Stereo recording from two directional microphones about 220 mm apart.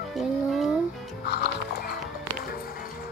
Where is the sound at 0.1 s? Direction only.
Centre (ahead or behind).